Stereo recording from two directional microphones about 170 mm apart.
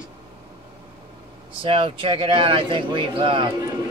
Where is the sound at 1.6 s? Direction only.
30° right (ahead or behind).